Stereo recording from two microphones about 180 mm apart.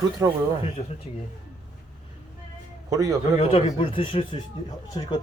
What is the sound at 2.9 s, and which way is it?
Speech, 20° right (ahead or behind).